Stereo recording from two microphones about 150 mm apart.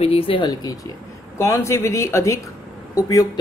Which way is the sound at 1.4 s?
20° left (ahead or behind).